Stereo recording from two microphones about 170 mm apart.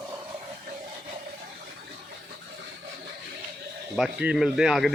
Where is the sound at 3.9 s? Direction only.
5° right (ahead or behind).